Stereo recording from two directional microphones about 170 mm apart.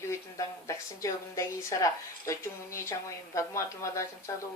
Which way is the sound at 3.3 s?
15° left (ahead or behind).